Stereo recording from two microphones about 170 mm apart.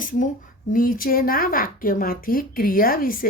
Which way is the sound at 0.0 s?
50° left (ahead or behind).